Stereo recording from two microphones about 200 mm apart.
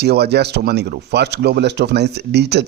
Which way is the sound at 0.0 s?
55° right (ahead or behind).